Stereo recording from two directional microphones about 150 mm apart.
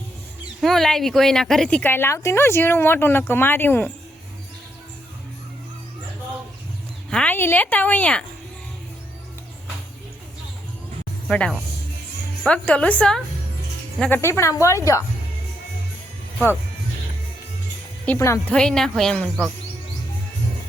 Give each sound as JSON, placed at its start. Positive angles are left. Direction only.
{"t": 0.6, "sound": "speech", "side_deg": 0}
{"t": 7.1, "sound": "speech", "side_deg": 10}
{"t": 11.3, "sound": "a woman's voice", "side_deg": 5}
{"t": 18.2, "sound": "a woman's voice", "side_deg": 20}
{"t": 18.5, "sound": "speech", "side_deg": 5}